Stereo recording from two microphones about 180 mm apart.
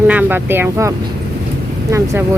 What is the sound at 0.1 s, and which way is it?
Speech, 10° right (ahead or behind).